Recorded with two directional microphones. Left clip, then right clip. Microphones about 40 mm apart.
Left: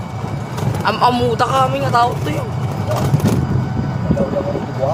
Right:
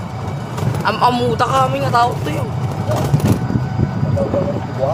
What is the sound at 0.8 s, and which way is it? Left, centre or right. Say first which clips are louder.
Speech: even; left.